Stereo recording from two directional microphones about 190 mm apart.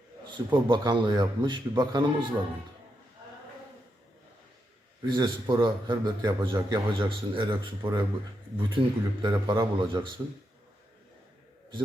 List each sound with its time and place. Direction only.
0.3 s a man's voice: 25° right (ahead or behind)
5.1 s a man's voice: 25° right (ahead or behind)